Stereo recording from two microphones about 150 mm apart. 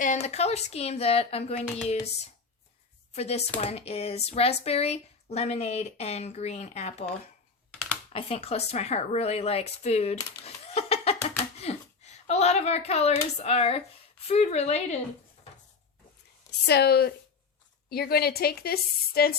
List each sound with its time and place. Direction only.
0.0 s speech: 50° left (ahead or behind)
3.1 s speech: 45° left (ahead or behind)
8.1 s speech: 40° left (ahead or behind)
10.4 s a sound: 45° left (ahead or behind)
11.6 s a woman's voice: 45° left (ahead or behind)
16.5 s a woman's voice: 90° left